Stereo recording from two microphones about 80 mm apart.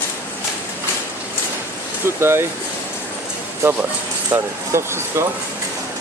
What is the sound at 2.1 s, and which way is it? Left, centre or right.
Speech, right.